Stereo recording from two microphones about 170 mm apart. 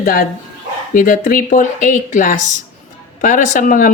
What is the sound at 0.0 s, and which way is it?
Speech, 50° left (ahead or behind).